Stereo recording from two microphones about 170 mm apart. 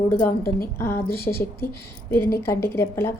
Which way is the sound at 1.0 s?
65° left (ahead or behind).